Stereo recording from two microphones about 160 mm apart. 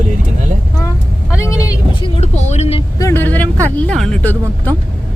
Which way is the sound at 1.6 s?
25° left (ahead or behind).